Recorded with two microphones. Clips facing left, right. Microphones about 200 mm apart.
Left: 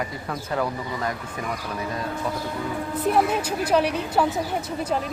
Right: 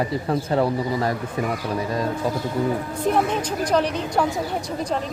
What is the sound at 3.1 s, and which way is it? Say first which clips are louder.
Speech: even; 10° left (ahead or behind).